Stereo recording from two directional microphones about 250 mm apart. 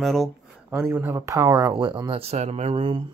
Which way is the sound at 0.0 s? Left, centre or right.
Centre.